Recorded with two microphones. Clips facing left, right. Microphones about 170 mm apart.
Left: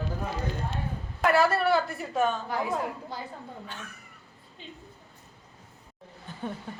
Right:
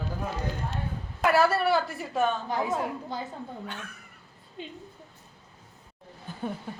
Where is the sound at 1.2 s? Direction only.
5° right (ahead or behind).